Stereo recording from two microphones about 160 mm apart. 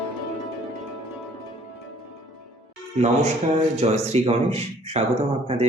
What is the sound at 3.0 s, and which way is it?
Speech, 45° right (ahead or behind).